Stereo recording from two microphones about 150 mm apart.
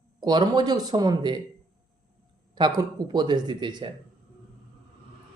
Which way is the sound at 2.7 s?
30° right (ahead or behind).